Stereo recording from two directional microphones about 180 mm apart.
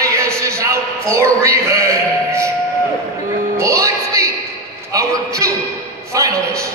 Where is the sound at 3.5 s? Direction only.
15° right (ahead or behind).